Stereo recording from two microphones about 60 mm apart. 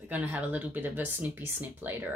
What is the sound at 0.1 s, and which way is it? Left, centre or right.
A woman's voice, right.